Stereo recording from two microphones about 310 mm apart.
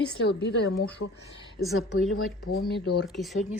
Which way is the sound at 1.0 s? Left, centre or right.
Left.